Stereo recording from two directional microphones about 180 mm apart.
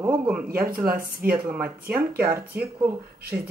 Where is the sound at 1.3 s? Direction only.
10° right (ahead or behind).